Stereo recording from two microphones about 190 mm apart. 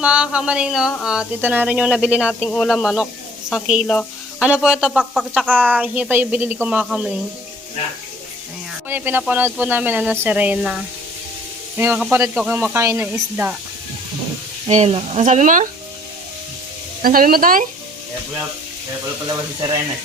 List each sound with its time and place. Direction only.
0.0 s speech: 5° right (ahead or behind)
8.9 s speech: 10° right (ahead or behind)
11.8 s speech: 10° right (ahead or behind)
14.7 s speech: 35° right (ahead or behind)
17.0 s speech: 50° right (ahead or behind)